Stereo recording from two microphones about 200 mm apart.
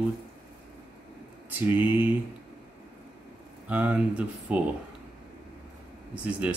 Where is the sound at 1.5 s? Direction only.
10° right (ahead or behind).